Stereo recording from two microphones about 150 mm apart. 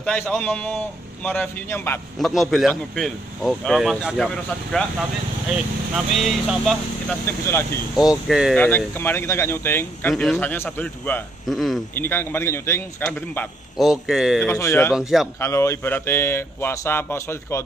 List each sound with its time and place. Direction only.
0.0 s speech: 5° left (ahead or behind)
2.1 s speech: centre (ahead or behind)
5.9 s speech: centre (ahead or behind)
7.2 s speech: 15° left (ahead or behind)
7.9 s speech: 5° right (ahead or behind)
8.5 s speech: 15° left (ahead or behind)
11.4 s speech: centre (ahead or behind)
11.9 s speech: 15° left (ahead or behind)
13.7 s speech: centre (ahead or behind)
14.4 s speech: 15° left (ahead or behind)
15.0 s speech: 5° right (ahead or behind)
15.4 s speech: 20° left (ahead or behind)